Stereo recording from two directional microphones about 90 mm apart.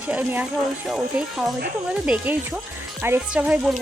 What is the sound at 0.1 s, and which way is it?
Speech, 20° right (ahead or behind).